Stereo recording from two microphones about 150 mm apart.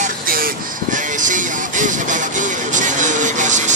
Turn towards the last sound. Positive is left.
turn(degrees=-55)  # may be behind; listen again after turning